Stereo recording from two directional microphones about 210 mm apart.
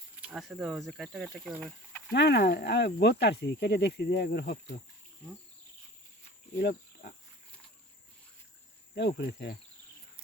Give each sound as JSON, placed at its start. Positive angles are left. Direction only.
{"t": 0.2, "sound": "speech", "side_deg": -5}
{"t": 2.1, "sound": "speech", "side_deg": 50}
{"t": 6.6, "sound": "speech", "side_deg": 50}
{"t": 9.0, "sound": "insect", "side_deg": 55}